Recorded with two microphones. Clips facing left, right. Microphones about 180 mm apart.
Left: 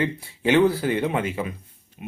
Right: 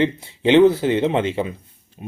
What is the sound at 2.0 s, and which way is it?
Music, 30° right (ahead or behind).